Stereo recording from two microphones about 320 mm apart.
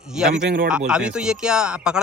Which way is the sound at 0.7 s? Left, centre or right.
Centre.